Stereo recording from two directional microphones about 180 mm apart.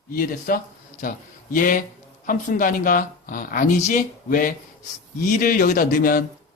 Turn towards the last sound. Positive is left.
turn(degrees=50)  # may be behind; listen again after turning